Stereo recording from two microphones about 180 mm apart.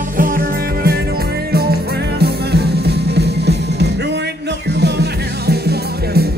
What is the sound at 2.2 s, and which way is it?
Music, 65° right (ahead or behind).